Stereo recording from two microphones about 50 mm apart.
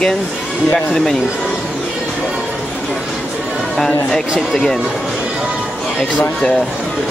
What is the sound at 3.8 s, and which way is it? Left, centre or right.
Speech, centre.